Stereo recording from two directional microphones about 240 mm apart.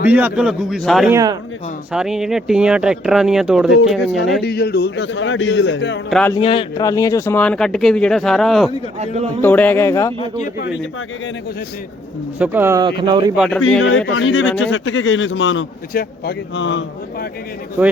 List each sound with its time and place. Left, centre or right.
0.1 s speech: centre
1.1 s speech: centre
1.9 s speech: centre
4.4 s a man's voice: left
6.1 s speech: centre
6.3 s speech: left; by 8.7 s centre
9.0 s speech: right
9.4 s a man's voice: centre
12.4 s speech: centre
13.3 s speech: centre
14.1 s a man's voice: left
15.9 s a man's voice: left
16.6 s a man's voice: left
17.8 s speech: centre